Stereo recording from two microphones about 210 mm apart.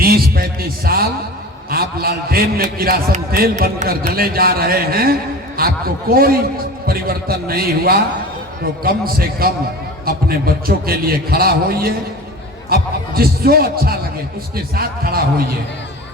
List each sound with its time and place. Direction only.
0.0 s a man's voice: 45° right (ahead or behind)